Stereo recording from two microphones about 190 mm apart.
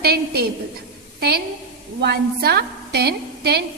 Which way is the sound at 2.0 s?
60° right (ahead or behind).